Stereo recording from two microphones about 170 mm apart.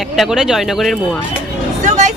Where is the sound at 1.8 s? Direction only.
45° right (ahead or behind).